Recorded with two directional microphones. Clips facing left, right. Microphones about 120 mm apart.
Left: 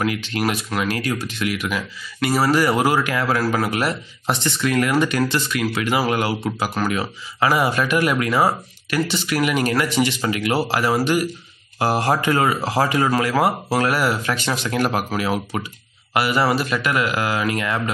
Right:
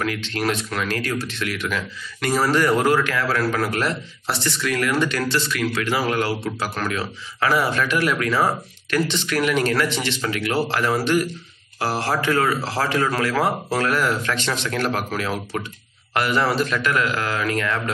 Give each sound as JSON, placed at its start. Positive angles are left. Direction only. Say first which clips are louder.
{"t": 0.0, "sound": "a man's voice", "louder": "left 2 dB", "side_deg": 15}